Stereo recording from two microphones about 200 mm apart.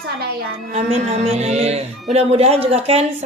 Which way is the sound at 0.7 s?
30° right (ahead or behind).